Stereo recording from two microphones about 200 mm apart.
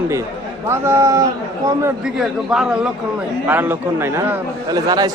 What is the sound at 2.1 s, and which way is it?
A man's voice, 5° right (ahead or behind).